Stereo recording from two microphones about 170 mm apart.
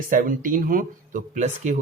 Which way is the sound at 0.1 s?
55° right (ahead or behind).